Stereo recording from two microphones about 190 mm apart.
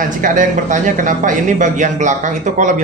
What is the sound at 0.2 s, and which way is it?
Speech, 45° right (ahead or behind).